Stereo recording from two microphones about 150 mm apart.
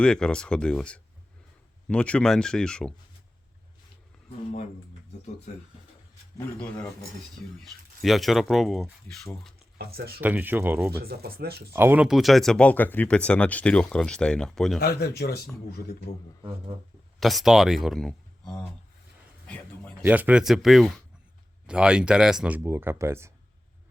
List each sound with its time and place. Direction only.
0.0 s speech: 5° left (ahead or behind)
6.3 s a man's voice: 10° left (ahead or behind)
7.6 s speech: centre (ahead or behind)
9.7 s speech: 90° right
10.2 s speech: 10° right (ahead or behind)
11.0 s speech: 90° right
11.7 s speech: 15° right (ahead or behind)
12.0 s speech: centre (ahead or behind)
14.8 s speech: 90° left
17.2 s speech: centre (ahead or behind)
20.0 s speech: 10° right (ahead or behind)